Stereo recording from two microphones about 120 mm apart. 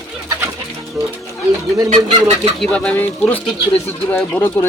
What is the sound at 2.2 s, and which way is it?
Speech, 65° right (ahead or behind).